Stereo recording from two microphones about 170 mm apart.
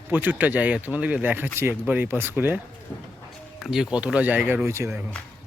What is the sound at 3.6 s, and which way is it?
Speech, 5° right (ahead or behind).